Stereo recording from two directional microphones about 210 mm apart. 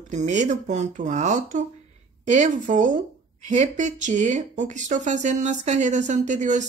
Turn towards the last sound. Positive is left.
turn(degrees=-35)  # may be behind; listen again after turning